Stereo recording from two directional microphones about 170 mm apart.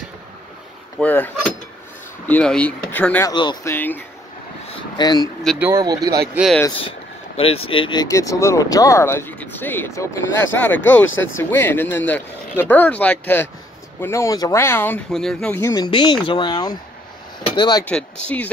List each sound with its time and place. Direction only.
0.9 s speech: 10° left (ahead or behind)
3.3 s speech: 25° left (ahead or behind)
3.6 s speech: 10° left (ahead or behind)
4.9 s speech: 25° left (ahead or behind)
5.8 s speech: 25° right (ahead or behind)
6.3 s speech: centre (ahead or behind)
6.8 s speech: 35° left (ahead or behind); by 15.0 s 15° left (ahead or behind)
15.0 s speech: centre (ahead or behind)
15.7 s speech: 25° left (ahead or behind)
17.8 s speech: 5° left (ahead or behind)